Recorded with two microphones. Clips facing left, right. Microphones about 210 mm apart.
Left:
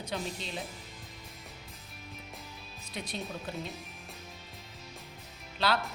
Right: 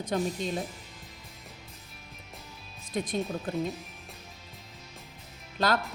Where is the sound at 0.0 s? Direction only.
50° right (ahead or behind).